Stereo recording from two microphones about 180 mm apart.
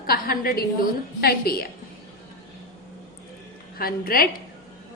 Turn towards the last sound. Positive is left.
turn(degrees=55)  # may be behind; listen again after turning